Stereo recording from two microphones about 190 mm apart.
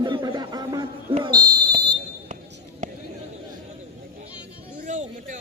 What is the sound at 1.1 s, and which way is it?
Fire alarm, 25° right (ahead or behind).